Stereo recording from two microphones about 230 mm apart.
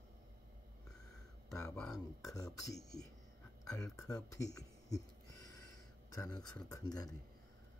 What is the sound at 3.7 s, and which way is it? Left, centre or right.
Speech, centre.